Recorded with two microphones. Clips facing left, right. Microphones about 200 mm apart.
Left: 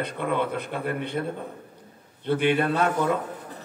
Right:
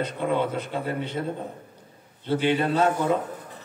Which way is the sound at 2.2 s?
55° left (ahead or behind).